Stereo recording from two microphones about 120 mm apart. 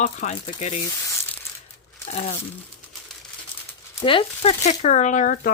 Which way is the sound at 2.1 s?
65° left (ahead or behind).